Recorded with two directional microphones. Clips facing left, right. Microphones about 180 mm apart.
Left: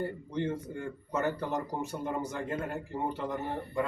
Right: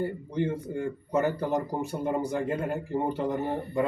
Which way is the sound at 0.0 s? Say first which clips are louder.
Right 4 dB; 10° right (ahead or behind).